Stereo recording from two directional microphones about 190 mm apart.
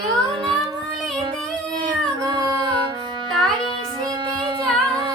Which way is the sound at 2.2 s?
25° right (ahead or behind).